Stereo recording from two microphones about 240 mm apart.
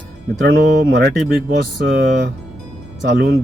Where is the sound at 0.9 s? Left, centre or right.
Right.